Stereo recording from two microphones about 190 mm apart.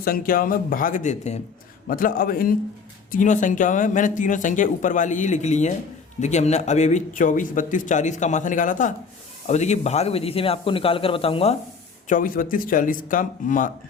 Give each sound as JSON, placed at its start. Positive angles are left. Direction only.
{"t": 0.0, "sound": "speech", "side_deg": 50}
{"t": 12.0, "sound": "speech", "side_deg": 45}